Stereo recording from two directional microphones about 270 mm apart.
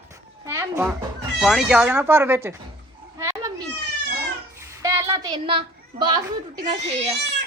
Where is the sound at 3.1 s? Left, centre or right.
Centre.